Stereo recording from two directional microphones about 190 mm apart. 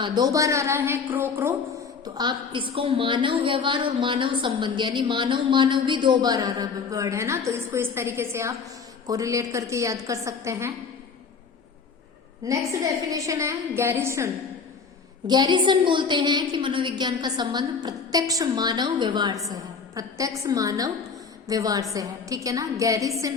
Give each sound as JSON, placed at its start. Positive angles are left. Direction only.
{"t": 0.0, "sound": "a woman's voice", "side_deg": -20}
{"t": 2.1, "sound": "a woman's voice", "side_deg": -25}
{"t": 13.1, "sound": "a woman's voice", "side_deg": -15}
{"t": 15.3, "sound": "a woman's voice", "side_deg": -20}